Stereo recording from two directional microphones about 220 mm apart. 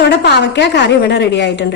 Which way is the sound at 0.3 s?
50° left (ahead or behind).